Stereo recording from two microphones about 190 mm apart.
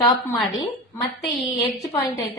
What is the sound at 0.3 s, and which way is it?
Speech, centre (ahead or behind).